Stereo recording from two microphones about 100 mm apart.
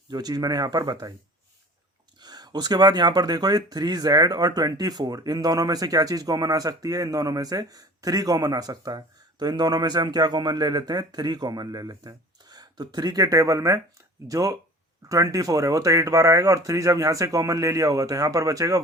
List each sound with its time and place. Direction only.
0.1 s speech: 40° right (ahead or behind)
2.1 s speech: 45° right (ahead or behind)